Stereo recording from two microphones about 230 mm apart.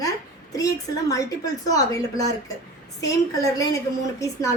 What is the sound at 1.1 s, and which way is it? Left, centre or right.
A woman's voice, centre.